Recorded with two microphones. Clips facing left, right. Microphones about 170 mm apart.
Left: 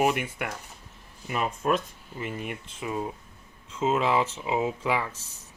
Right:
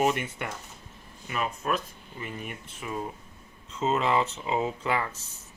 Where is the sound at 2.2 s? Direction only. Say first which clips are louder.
Left 4 dB; 20° left (ahead or behind).